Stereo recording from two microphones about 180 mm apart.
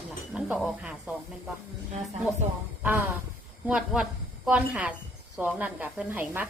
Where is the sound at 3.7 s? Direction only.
5° right (ahead or behind).